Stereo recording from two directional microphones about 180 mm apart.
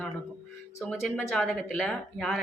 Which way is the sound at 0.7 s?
15° left (ahead or behind).